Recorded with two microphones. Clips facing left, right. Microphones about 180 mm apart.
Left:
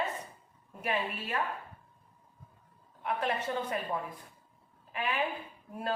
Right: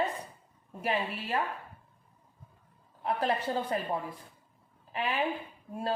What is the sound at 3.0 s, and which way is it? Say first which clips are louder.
A woman's voice: right 3 dB; 35° right (ahead or behind).